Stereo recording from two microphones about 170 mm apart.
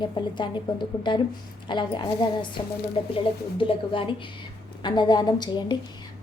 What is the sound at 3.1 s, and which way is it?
A woman's voice, 30° left (ahead or behind).